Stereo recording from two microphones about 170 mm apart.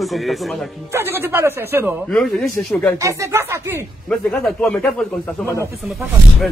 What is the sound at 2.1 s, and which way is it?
Speech, 5° left (ahead or behind).